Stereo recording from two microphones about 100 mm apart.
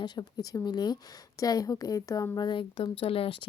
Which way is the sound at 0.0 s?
40° left (ahead or behind).